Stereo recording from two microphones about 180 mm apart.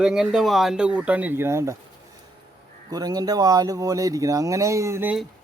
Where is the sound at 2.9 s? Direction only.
20° right (ahead or behind).